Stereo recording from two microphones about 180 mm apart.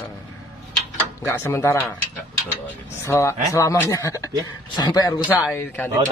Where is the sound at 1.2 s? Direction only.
15° left (ahead or behind).